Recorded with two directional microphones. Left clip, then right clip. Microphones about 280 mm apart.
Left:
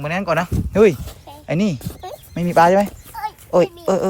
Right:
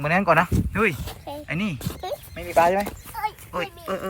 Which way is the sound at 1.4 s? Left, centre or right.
Centre.